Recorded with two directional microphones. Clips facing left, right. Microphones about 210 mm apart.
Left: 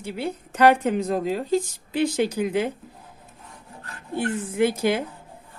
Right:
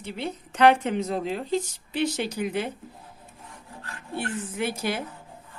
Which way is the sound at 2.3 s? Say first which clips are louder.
Left 5 dB; 10° left (ahead or behind).